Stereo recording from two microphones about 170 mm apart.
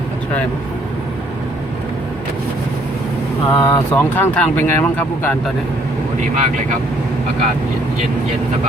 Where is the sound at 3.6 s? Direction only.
15° left (ahead or behind).